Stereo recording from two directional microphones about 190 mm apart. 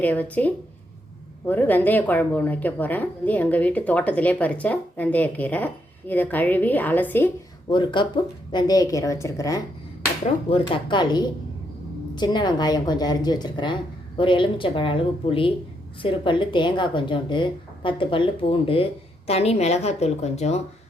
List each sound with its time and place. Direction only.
0.0 s speech: 10° left (ahead or behind)
7.7 s a woman's voice: 25° left (ahead or behind)